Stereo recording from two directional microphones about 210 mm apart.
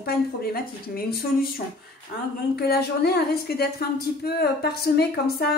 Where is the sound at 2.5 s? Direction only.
50° left (ahead or behind).